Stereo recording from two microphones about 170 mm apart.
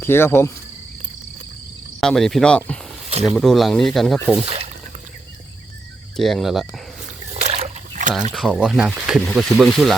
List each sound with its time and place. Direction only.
0.0 s speech: 15° left (ahead or behind)
2.0 s speech: centre (ahead or behind)
4.4 s speech: 35° right (ahead or behind)
6.1 s speech: centre (ahead or behind)
7.4 s rowboat: 40° right (ahead or behind)
8.3 s speech: centre (ahead or behind)